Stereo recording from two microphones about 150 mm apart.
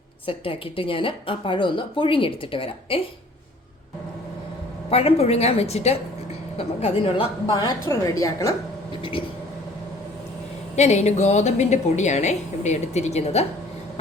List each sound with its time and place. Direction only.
0.3 s speech: 35° left (ahead or behind)
4.9 s a woman's voice: 40° left (ahead or behind)
7.6 s a woman's voice: 25° left (ahead or behind)
9.0 s a sound: 35° left (ahead or behind)
10.8 s a woman's voice: 50° left (ahead or behind)